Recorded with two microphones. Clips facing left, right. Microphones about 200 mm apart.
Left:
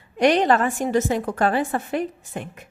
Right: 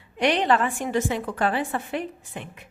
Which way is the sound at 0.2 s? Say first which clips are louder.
Left 4 dB; 45° left (ahead or behind).